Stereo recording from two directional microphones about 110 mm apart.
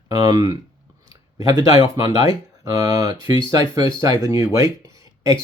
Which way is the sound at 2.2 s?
30° right (ahead or behind).